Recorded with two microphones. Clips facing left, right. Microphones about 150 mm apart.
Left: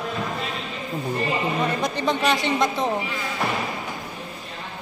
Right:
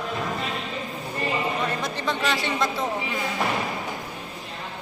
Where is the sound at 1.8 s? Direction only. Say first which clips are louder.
Left 4 dB; 15° left (ahead or behind).